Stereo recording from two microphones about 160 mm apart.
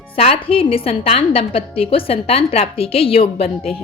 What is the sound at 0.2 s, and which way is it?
A woman's voice, 35° left (ahead or behind).